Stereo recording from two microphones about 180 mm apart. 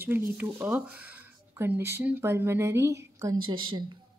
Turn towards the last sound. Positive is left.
turn(degrees=-25)  # may be behind; listen again after turning